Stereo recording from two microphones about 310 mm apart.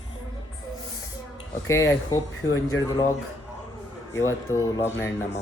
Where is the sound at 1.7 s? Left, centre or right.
Centre.